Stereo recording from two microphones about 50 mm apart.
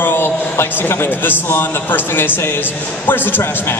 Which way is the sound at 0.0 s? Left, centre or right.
Left.